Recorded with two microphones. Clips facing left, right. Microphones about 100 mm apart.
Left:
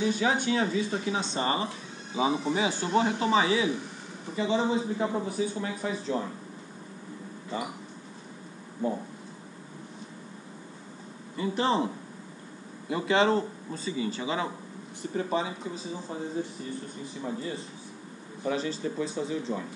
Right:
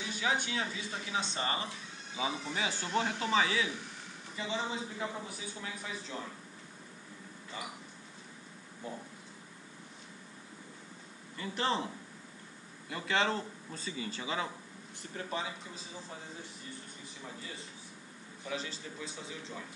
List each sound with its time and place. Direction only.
0.0 s a man's voice: 35° left (ahead or behind)
11.3 s speech: 15° left (ahead or behind)
12.9 s speech: 15° left (ahead or behind)
15.1 s speech: 25° left (ahead or behind)
18.4 s speech: 45° left (ahead or behind)